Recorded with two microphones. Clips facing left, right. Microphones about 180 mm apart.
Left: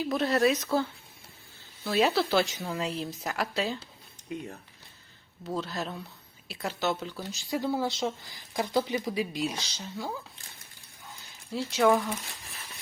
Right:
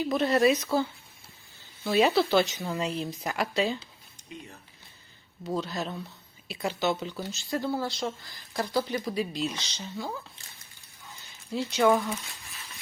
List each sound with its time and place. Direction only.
0.0 s speech: centre (ahead or behind)
4.3 s speech: 55° left (ahead or behind)
5.5 s speech: centre (ahead or behind)
7.3 s speech: 10° left (ahead or behind)
11.5 s speech: centre (ahead or behind)